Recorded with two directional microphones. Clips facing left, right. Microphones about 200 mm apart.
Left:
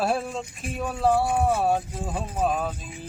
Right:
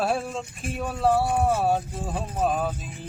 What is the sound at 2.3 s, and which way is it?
Speech, centre (ahead or behind).